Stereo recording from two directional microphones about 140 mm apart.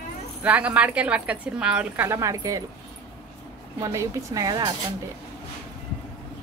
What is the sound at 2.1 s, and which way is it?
Speech, 20° right (ahead or behind).